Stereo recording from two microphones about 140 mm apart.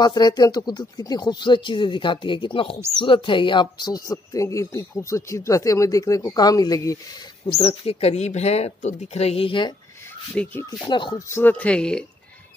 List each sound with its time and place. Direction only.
0.0 s speech: 30° left (ahead or behind)
7.5 s speech: 40° left (ahead or behind)
10.3 s speech: 10° left (ahead or behind)
10.8 s speech: 35° left (ahead or behind)
11.2 s speech: 15° left (ahead or behind)